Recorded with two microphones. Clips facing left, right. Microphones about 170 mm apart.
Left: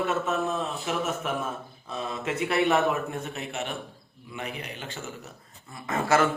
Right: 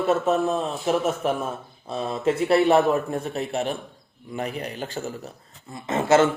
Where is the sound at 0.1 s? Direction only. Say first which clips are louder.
Right 6 dB; 35° right (ahead or behind).